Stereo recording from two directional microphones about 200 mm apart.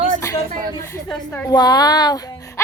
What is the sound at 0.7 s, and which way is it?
Speech, 15° left (ahead or behind).